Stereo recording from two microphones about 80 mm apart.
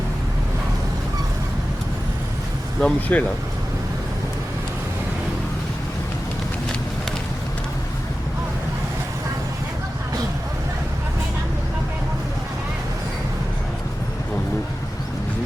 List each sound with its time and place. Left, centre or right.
2.8 s speech: centre